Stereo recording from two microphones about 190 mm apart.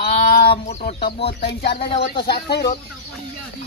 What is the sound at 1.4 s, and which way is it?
Speech, 60° left (ahead or behind).